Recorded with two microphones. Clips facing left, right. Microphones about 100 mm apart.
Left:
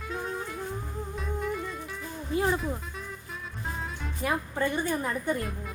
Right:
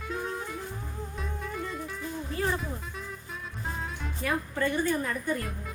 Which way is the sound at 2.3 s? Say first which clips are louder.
Left 4 dB; 15° left (ahead or behind).